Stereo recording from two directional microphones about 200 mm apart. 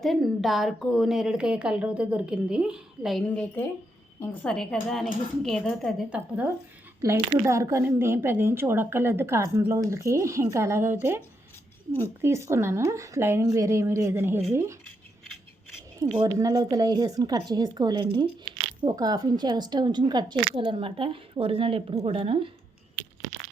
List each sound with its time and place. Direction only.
0.0 s a woman's voice: centre (ahead or behind)
12.2 s a woman's voice: 15° right (ahead or behind)
16.2 s speech: 20° right (ahead or behind)